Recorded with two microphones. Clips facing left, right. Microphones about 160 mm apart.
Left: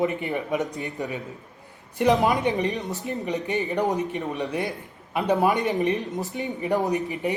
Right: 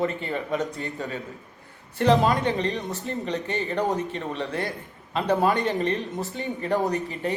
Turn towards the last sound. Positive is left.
turn(degrees=15)  # may be behind; listen again after turning